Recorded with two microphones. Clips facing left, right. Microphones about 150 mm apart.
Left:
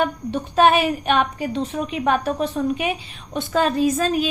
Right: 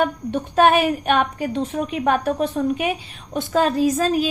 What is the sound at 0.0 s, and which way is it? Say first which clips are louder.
A woman's voice: right 1 dB; 50° right (ahead or behind).